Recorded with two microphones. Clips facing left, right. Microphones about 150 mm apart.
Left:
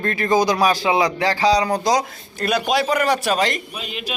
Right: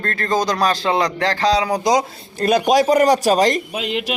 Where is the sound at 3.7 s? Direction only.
75° right (ahead or behind).